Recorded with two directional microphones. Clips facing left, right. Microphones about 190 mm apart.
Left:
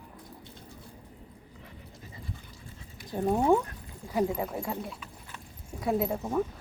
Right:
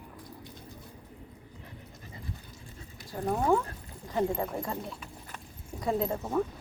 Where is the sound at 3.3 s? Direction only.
20° left (ahead or behind).